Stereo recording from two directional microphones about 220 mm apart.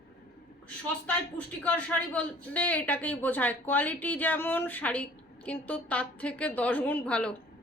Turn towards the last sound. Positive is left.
turn(degrees=5)  # may be behind; listen again after turning